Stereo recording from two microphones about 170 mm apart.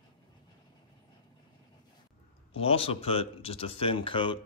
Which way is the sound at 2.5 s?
35° left (ahead or behind).